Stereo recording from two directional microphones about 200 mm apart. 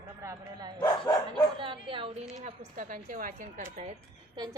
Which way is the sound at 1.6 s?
25° right (ahead or behind).